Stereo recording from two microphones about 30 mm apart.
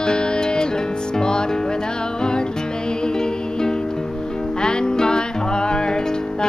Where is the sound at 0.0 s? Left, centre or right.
Left.